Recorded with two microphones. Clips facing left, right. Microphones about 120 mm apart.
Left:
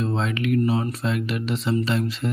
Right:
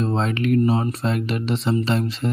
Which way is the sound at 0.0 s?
35° right (ahead or behind).